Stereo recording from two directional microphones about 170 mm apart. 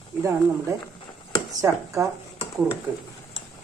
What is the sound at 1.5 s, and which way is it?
Speech, 20° right (ahead or behind).